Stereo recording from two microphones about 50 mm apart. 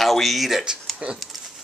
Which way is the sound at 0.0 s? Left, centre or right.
Centre.